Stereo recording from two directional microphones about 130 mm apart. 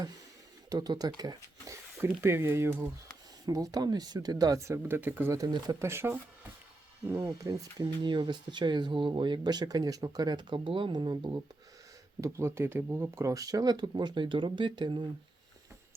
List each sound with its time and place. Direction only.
0.7 s speech: 30° right (ahead or behind)
3.4 s speech: 30° right (ahead or behind)
5.4 s speech: 30° right (ahead or behind)
5.8 s speech: 20° right (ahead or behind)
7.2 s speech: 25° right (ahead or behind)
12.2 s speech: 20° right (ahead or behind); by 15.0 s 35° right (ahead or behind)